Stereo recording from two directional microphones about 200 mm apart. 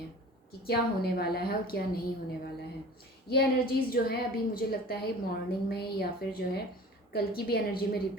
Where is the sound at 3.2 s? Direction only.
50° left (ahead or behind).